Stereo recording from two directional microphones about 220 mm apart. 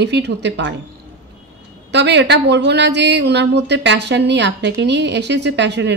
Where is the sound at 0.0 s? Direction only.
50° right (ahead or behind).